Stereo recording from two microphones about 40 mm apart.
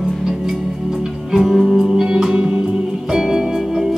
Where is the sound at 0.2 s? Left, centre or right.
Centre.